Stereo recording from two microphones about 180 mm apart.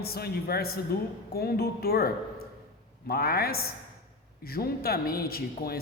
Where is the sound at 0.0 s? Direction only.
60° left (ahead or behind).